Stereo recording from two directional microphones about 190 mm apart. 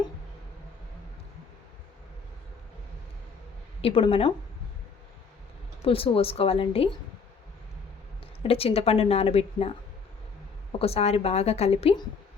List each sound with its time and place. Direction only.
3.8 s a woman's voice: 30° left (ahead or behind)
5.8 s a woman's voice: 30° left (ahead or behind)
8.4 s a woman's voice: 30° left (ahead or behind)